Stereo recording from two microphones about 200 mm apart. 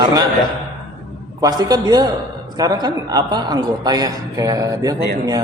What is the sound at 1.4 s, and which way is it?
A man's voice, 20° right (ahead or behind).